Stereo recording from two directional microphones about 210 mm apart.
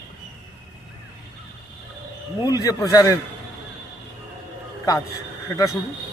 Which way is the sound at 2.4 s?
15° left (ahead or behind).